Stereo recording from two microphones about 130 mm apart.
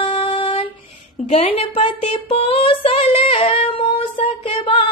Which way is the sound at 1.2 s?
55° left (ahead or behind).